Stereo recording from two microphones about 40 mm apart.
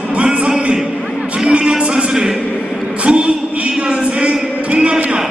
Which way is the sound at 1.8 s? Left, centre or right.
Right.